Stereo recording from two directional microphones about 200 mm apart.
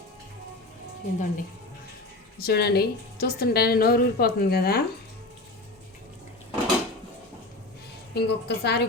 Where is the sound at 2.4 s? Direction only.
55° left (ahead or behind).